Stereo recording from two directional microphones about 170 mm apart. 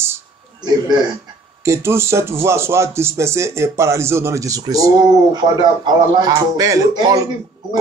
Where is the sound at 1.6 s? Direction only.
15° right (ahead or behind).